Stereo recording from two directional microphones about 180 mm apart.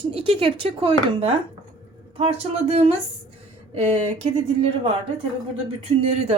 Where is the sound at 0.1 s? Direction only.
30° right (ahead or behind).